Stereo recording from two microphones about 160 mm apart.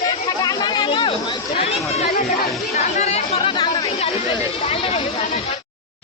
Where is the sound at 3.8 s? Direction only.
35° left (ahead or behind).